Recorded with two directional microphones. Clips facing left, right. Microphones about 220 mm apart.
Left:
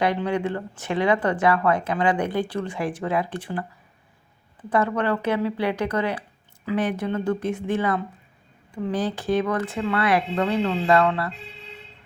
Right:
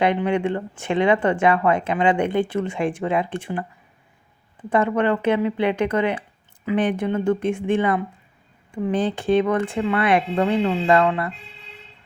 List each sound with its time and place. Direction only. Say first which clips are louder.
0.0 s a woman's voice: right 3 dB; 20° right (ahead or behind)
4.8 s a woman's voice: right 3 dB; 15° right (ahead or behind)